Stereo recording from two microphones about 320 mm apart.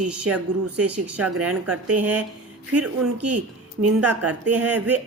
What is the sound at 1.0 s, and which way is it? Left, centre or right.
Speech, centre.